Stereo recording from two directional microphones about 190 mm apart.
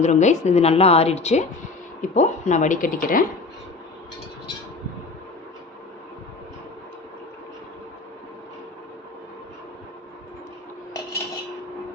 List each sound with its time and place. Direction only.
0.0 s speech: 40° left (ahead or behind)